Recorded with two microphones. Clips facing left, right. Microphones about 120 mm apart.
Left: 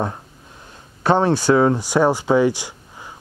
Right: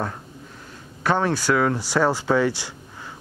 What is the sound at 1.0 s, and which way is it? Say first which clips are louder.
Speech: left 5 dB; 25° left (ahead or behind).